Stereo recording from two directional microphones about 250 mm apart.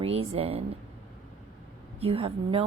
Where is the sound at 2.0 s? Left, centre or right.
Right.